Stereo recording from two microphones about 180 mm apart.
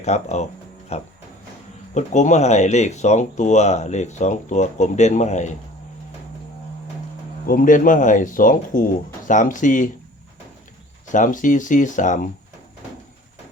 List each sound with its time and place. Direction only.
0.0 s speech: 40° left (ahead or behind)
7.4 s speech: 50° left (ahead or behind)
11.1 s speech: 45° left (ahead or behind)